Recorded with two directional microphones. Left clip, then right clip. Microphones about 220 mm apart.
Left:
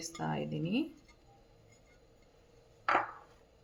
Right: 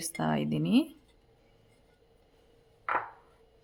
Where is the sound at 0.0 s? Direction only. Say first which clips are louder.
Right 6 dB; 55° right (ahead or behind).